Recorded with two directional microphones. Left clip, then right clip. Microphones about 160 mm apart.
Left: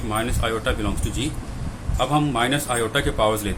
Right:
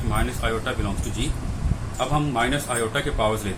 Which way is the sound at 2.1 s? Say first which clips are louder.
Left 2 dB; 55° left (ahead or behind).